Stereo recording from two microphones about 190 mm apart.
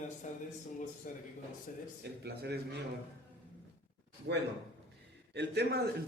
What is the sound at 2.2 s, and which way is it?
Speech, 60° right (ahead or behind).